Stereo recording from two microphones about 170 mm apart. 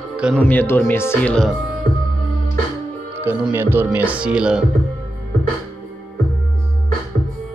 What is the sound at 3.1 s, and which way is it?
Music, 10° right (ahead or behind).